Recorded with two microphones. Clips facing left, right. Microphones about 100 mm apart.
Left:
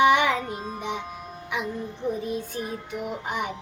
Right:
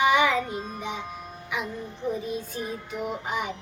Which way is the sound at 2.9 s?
55° left (ahead or behind).